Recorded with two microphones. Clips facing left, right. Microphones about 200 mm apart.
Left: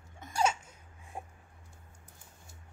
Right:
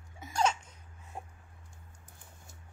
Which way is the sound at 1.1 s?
15° left (ahead or behind).